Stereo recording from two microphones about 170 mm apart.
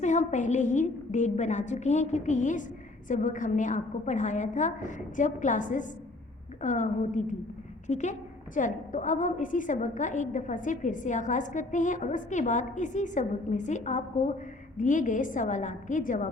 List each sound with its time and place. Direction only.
0.0 s a woman's voice: 45° left (ahead or behind)